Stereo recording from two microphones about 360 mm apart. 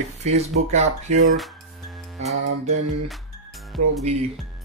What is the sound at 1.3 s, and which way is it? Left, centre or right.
Music, centre.